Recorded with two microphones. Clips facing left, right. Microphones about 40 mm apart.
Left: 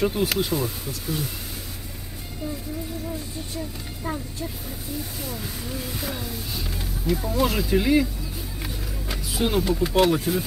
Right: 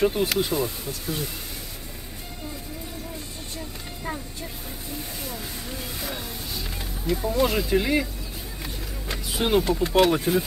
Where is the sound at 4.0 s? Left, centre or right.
Centre.